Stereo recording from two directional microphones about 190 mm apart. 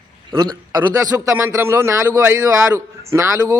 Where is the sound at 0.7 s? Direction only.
20° right (ahead or behind).